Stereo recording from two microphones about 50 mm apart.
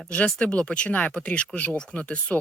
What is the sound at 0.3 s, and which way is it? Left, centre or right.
Speech, left.